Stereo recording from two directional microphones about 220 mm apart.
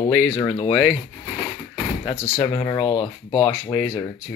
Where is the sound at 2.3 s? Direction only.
30° left (ahead or behind).